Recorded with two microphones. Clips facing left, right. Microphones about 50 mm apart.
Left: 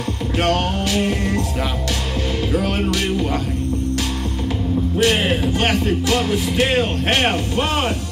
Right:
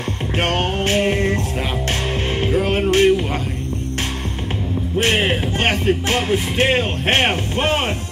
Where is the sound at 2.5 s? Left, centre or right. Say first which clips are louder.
Right 5 dB; right.